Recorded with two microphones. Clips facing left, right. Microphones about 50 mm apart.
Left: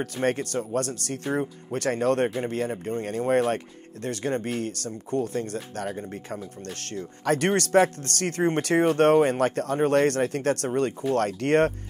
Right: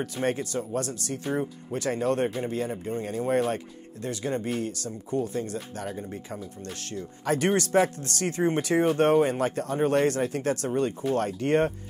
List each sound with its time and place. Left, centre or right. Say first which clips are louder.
0.0 s speech: left 2 dB; left
1.2 s speech: left 2 dB; left